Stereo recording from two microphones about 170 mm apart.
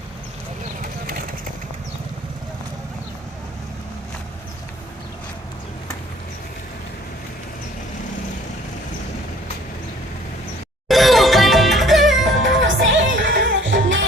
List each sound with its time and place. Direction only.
10.8 s music: centre (ahead or behind)
12.4 s music: 90° right